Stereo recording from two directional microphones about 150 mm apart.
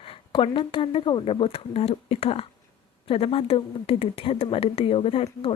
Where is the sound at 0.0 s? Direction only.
40° left (ahead or behind).